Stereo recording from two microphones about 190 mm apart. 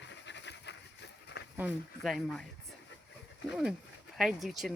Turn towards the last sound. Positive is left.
turn(degrees=0)  # may be behind; listen again after turning